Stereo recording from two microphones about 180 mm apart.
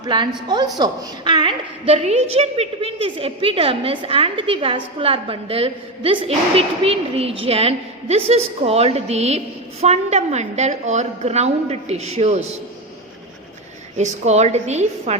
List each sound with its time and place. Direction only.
0.0 s a woman's voice: 25° right (ahead or behind)
13.9 s a woman's voice: 40° right (ahead or behind)